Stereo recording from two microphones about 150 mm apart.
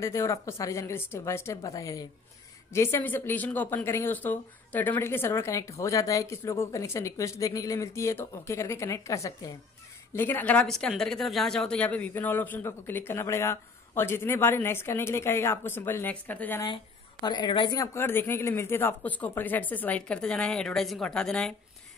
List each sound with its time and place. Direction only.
0.0 s speech: 20° left (ahead or behind)
16.6 s speech: 30° left (ahead or behind)
17.7 s speech: 15° left (ahead or behind)